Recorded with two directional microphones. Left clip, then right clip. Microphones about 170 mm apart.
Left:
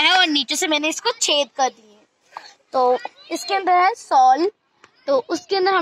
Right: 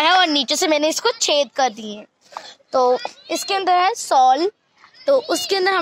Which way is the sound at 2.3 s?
35° right (ahead or behind).